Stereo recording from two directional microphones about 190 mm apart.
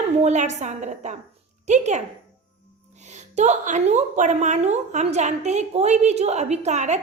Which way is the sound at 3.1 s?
40° right (ahead or behind).